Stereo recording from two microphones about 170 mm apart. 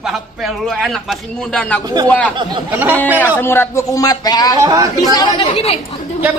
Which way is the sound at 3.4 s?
15° left (ahead or behind).